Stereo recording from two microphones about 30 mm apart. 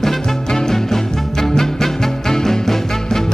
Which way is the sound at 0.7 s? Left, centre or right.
Centre.